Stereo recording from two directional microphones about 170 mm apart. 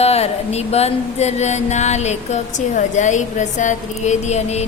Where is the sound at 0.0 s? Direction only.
40° left (ahead or behind).